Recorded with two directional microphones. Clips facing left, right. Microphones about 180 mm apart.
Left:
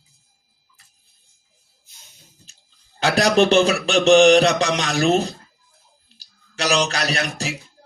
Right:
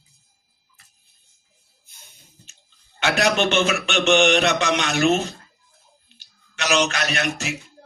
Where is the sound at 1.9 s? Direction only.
55° right (ahead or behind).